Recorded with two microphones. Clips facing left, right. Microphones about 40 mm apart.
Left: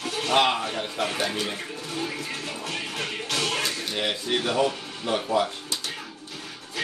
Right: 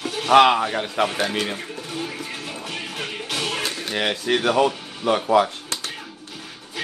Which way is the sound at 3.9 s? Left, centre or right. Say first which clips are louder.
Right 7 dB; right.